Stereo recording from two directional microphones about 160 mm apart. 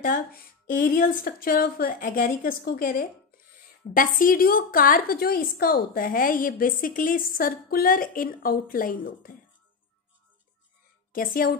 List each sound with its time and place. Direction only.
0.0 s a woman's voice: 65° left (ahead or behind)
11.1 s a woman's voice: 65° left (ahead or behind)